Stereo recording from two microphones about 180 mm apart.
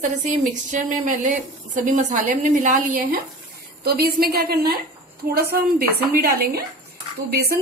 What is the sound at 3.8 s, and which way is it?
A woman's voice, 60° right (ahead or behind).